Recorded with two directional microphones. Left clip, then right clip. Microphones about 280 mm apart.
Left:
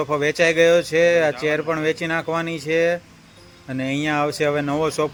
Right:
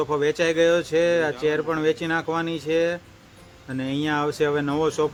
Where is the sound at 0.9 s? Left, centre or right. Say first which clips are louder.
Left 4 dB; right.